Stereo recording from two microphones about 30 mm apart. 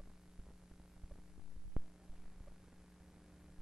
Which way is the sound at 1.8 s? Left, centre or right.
Centre.